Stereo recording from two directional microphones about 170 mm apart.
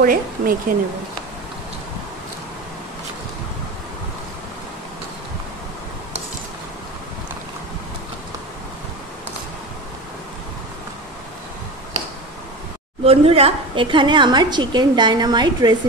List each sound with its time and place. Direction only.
0.0 s speech: 55° right (ahead or behind)
13.0 s a woman's voice: 35° right (ahead or behind)